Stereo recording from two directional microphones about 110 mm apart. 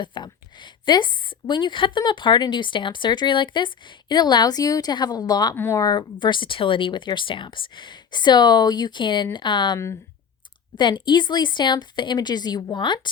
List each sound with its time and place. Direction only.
0.0 s a woman's voice: 45° left (ahead or behind)
5.5 s speech: 20° left (ahead or behind)
5.8 s speech: 40° left (ahead or behind)
9.7 s speech: 30° left (ahead or behind)
10.8 s speech: 45° left (ahead or behind)